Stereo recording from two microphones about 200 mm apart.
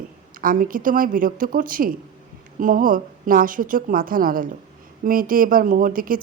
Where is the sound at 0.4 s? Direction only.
45° right (ahead or behind).